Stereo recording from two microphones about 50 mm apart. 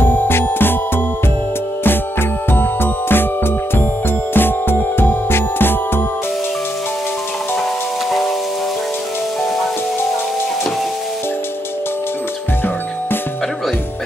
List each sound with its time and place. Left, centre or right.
0.0 s music: left
2.5 s music: left